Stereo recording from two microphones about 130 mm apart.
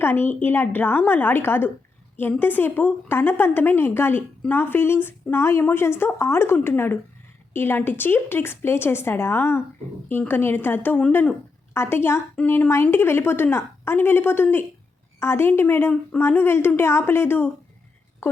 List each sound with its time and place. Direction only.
0.0 s a woman's voice: 15° left (ahead or behind)